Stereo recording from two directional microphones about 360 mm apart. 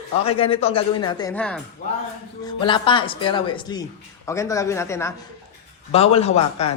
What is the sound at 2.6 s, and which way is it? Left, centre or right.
Speech, centre.